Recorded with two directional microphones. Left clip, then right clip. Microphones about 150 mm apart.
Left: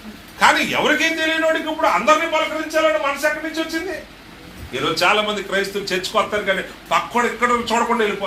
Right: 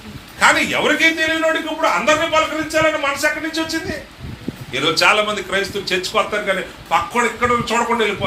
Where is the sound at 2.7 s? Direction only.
40° right (ahead or behind).